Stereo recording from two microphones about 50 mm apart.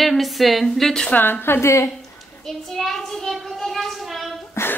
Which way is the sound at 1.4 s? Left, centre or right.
Left.